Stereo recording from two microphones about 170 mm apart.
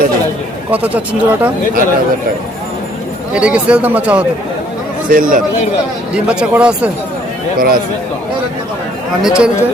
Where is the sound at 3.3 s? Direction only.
5° right (ahead or behind).